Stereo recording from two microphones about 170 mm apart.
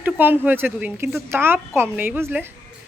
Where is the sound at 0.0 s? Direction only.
10° right (ahead or behind).